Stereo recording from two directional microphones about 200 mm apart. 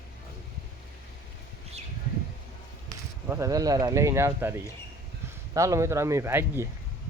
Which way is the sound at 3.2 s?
15° right (ahead or behind).